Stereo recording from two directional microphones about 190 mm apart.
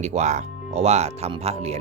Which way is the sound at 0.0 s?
35° right (ahead or behind).